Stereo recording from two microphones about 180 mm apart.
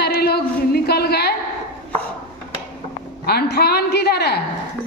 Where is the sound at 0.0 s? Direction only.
60° left (ahead or behind).